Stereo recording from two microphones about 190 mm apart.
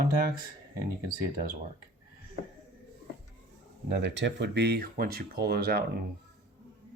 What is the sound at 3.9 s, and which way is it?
Speech, 65° right (ahead or behind).